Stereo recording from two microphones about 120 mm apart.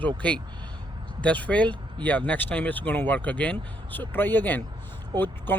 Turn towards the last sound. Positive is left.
turn(degrees=15)  # may be behind; listen again after turning